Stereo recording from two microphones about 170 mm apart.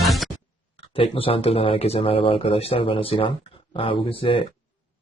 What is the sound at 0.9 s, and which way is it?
Speech, 35° left (ahead or behind).